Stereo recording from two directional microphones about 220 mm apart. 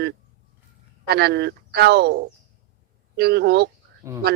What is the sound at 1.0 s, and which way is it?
Speech, 45° right (ahead or behind).